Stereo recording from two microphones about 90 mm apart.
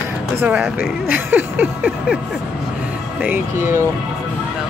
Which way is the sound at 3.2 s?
20° right (ahead or behind).